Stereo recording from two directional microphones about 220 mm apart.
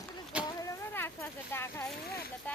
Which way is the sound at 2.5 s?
5° left (ahead or behind).